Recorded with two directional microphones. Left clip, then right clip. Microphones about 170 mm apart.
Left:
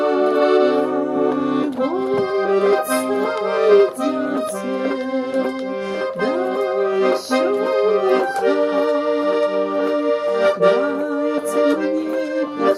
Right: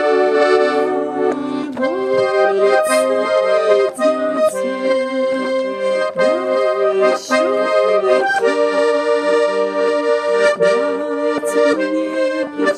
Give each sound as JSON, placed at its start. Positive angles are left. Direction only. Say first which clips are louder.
{"t": 0.0, "sound": "music", "louder": "right 3 dB", "side_deg": -40}
{"t": 2.1, "sound": "music", "louder": "right 5 dB", "side_deg": -25}
{"t": 7.0, "sound": "accordion", "louder": "right 3 dB", "side_deg": -25}